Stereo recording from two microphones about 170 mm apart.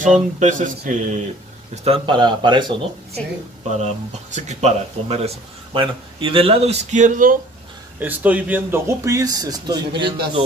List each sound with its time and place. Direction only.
0.0 s speech: 45° right (ahead or behind)
1.9 s speech: 25° right (ahead or behind)
3.6 s speech: 40° right (ahead or behind)
8.0 s a man's voice: 10° right (ahead or behind); by 10.1 s 25° right (ahead or behind)